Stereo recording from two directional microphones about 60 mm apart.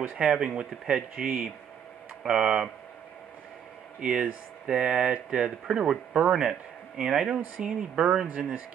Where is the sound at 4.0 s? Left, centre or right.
Centre.